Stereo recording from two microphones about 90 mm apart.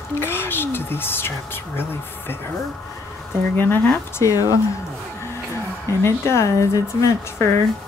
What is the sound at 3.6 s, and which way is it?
Speech, 20° left (ahead or behind).